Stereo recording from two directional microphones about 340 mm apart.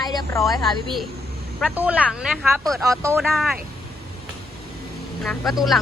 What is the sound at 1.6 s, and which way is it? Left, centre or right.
Speech, centre.